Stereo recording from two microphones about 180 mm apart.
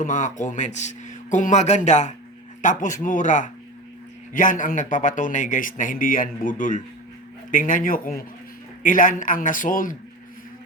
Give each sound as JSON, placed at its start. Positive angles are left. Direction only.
{"t": 0.0, "sound": "a man's voice", "side_deg": 45}